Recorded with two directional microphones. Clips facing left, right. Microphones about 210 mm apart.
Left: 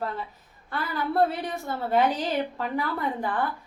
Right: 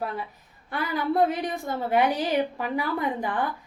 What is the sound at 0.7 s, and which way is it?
A woman's voice, 15° right (ahead or behind).